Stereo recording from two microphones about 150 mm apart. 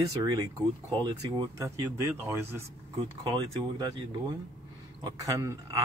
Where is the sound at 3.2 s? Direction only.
35° right (ahead or behind).